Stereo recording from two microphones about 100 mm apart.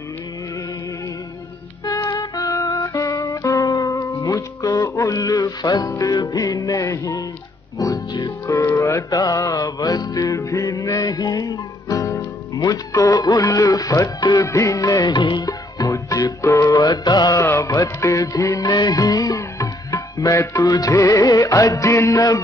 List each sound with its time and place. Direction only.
2.0 s music: 40° left (ahead or behind)
8.5 s music: 30° left (ahead or behind); by 15.5 s 45° left (ahead or behind)
15.8 s music: 35° left (ahead or behind)
17.4 s music: 30° left (ahead or behind)